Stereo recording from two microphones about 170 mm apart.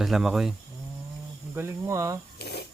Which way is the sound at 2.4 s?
75° left (ahead or behind).